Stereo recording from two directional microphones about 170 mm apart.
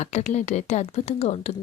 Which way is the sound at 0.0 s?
40° left (ahead or behind).